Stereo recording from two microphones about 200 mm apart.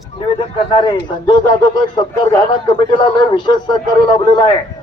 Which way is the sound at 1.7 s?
20° left (ahead or behind).